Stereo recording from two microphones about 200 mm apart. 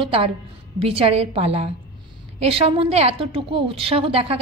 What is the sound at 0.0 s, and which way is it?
A woman's voice, 30° right (ahead or behind).